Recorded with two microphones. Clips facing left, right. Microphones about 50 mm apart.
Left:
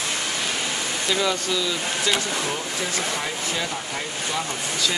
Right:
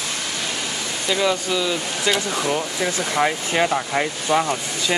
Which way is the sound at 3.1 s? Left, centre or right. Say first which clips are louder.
Right 7 dB; right.